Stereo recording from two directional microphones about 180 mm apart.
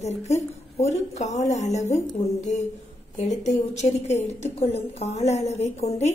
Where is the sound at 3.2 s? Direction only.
40° left (ahead or behind).